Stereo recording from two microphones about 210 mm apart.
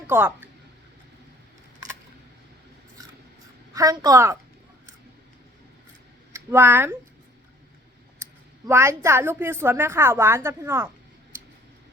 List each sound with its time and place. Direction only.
0.1 s a woman's voice: 10° right (ahead or behind)
3.8 s a woman's voice: 15° right (ahead or behind)
6.3 s speech: 10° right (ahead or behind)
8.6 s a woman's voice: 15° right (ahead or behind)